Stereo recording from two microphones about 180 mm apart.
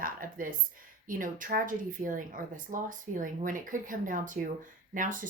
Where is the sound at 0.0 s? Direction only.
50° right (ahead or behind).